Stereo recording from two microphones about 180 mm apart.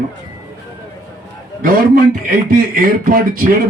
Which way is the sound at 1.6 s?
50° right (ahead or behind).